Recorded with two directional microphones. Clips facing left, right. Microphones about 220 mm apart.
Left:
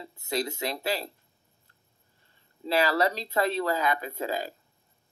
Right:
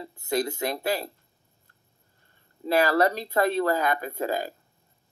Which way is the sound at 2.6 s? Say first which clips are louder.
Right 3 dB; 50° right (ahead or behind).